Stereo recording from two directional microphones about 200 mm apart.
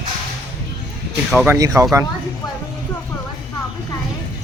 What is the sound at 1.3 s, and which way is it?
Speech, 5° right (ahead or behind).